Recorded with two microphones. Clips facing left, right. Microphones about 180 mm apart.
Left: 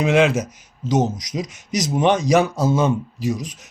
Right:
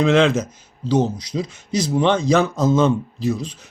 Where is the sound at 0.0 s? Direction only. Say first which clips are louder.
Right 1 dB; 10° left (ahead or behind).